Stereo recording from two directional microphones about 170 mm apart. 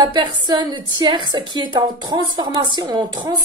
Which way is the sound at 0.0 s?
25° right (ahead or behind).